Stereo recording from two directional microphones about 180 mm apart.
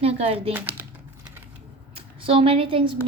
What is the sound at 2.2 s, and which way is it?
Speech, 30° right (ahead or behind).